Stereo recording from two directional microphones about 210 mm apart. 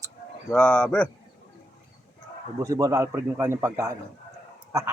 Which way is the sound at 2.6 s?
15° right (ahead or behind).